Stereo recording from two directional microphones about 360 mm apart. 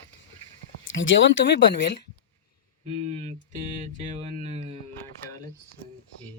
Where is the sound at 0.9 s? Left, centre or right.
Left.